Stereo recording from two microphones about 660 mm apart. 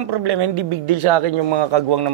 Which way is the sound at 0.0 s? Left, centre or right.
Right.